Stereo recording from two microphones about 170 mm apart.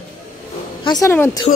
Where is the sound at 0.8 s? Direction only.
20° left (ahead or behind).